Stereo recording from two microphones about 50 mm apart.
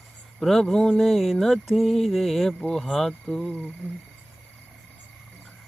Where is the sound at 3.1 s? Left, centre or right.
Left.